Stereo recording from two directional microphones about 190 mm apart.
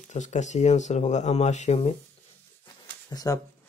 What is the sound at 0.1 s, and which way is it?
Speech, 40° left (ahead or behind).